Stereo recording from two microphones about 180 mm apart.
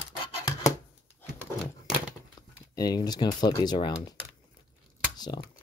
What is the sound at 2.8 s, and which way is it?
Speech, 20° left (ahead or behind).